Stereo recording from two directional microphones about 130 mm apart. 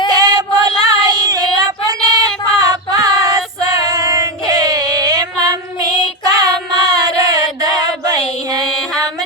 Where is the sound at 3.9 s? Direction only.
25° right (ahead or behind).